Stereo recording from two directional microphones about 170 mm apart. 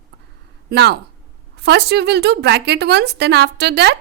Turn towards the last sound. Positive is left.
turn(degrees=-75)  # may be behind; listen again after turning